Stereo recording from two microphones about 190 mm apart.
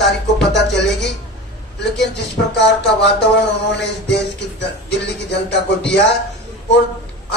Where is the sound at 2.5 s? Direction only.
65° left (ahead or behind).